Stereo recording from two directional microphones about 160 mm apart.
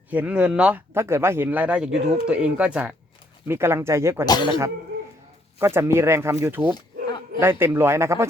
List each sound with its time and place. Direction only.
0.1 s speech: 10° right (ahead or behind)
4.3 s speech: 30° left (ahead or behind)
5.5 s speech: 15° right (ahead or behind)